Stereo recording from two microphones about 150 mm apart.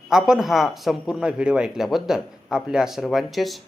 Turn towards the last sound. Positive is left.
turn(degrees=0)  # may be behind; listen again after turning